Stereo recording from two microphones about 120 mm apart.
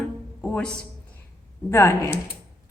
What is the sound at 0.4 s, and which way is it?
Music, 10° left (ahead or behind).